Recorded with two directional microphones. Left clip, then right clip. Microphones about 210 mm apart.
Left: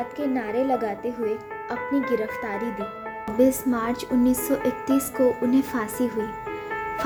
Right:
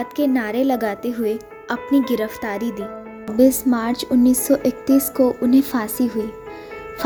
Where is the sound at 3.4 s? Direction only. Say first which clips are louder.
Right 5 dB; 25° right (ahead or behind).